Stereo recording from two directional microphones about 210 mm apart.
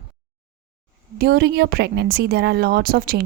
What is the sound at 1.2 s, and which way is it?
A woman's voice, 50° right (ahead or behind).